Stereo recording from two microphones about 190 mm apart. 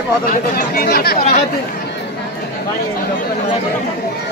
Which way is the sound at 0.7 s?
55° left (ahead or behind).